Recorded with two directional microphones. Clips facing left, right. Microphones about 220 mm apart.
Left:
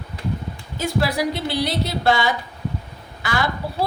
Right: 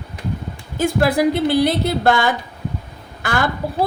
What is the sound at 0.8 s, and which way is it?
A woman's voice, 50° right (ahead or behind).